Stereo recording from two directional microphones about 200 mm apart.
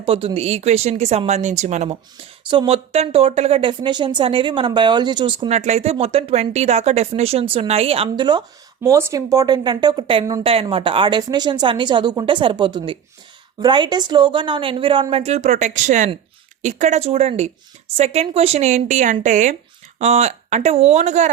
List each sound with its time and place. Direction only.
0.0 s a woman's voice: 30° right (ahead or behind)